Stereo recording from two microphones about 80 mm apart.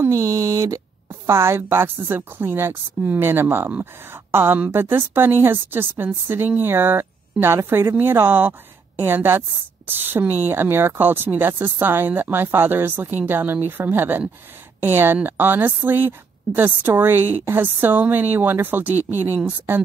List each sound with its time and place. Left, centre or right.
0.1 s a woman's voice: right